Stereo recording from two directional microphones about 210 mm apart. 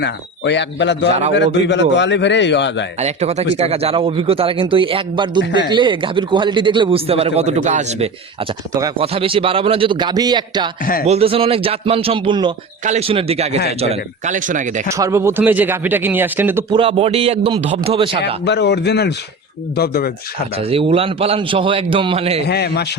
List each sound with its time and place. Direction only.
0.0 s a man's voice: 55° left (ahead or behind)
3.0 s a man's voice: 30° right (ahead or behind)
8.7 s a man's voice: 20° right (ahead or behind); by 14.8 s 40° right (ahead or behind)
14.8 s speech: 15° right (ahead or behind)
16.7 s a man's voice: 25° right (ahead or behind)
18.4 s a man's voice: 55° left (ahead or behind)
20.6 s a man's voice: 25° right (ahead or behind)
22.4 s a man's voice: 50° left (ahead or behind)